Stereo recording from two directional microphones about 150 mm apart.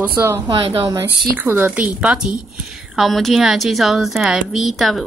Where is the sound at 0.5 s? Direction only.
35° right (ahead or behind).